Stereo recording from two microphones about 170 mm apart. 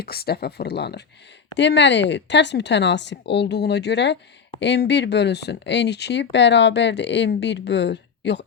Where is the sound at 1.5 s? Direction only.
90° left.